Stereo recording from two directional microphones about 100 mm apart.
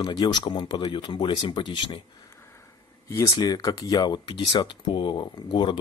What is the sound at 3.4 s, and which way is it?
Speech, 40° left (ahead or behind).